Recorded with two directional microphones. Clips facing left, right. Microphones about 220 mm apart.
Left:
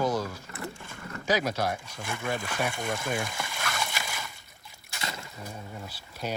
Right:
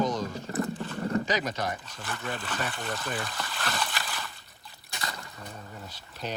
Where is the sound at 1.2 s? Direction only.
10° left (ahead or behind).